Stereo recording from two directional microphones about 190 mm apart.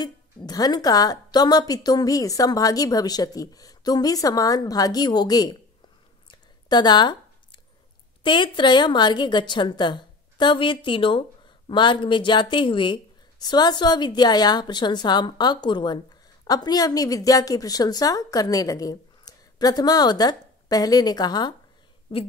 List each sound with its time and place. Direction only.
0.5 s a woman's voice: 20° left (ahead or behind)
6.7 s a woman's voice: 20° left (ahead or behind)
8.2 s a woman's voice: 25° left (ahead or behind)